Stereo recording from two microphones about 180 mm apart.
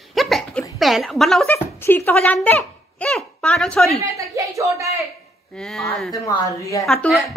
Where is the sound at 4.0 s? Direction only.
15° right (ahead or behind).